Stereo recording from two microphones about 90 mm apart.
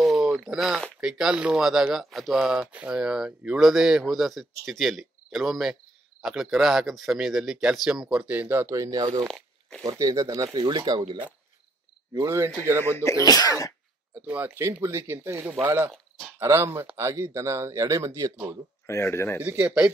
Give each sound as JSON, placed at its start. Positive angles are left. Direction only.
{"t": 0.2, "sound": "a sound", "side_deg": -5}
{"t": 1.0, "sound": "speech", "side_deg": -5}
{"t": 2.6, "sound": "speech", "side_deg": -15}
{"t": 8.7, "sound": "speech", "side_deg": -40}
{"t": 9.3, "sound": "zipper", "side_deg": 5}
{"t": 9.8, "sound": "speech", "side_deg": -40}
{"t": 12.2, "sound": "speech", "side_deg": -30}
{"t": 13.0, "sound": "speech", "side_deg": 40}
{"t": 14.1, "sound": "speech", "side_deg": -20}
{"t": 18.9, "sound": "a man's voice", "side_deg": 30}
{"t": 19.4, "sound": "a man's voice", "side_deg": -15}